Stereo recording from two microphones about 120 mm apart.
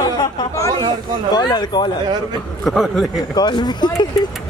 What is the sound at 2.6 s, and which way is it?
Speech, centre (ahead or behind).